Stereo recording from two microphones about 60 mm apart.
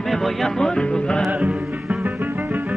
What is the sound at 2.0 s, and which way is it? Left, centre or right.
Music, right.